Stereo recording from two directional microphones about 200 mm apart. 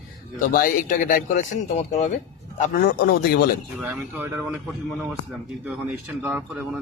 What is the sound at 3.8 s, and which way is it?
Speech, 5° right (ahead or behind).